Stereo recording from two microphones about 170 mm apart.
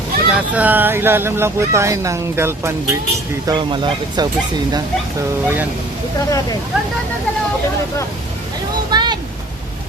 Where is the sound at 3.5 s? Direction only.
30° right (ahead or behind).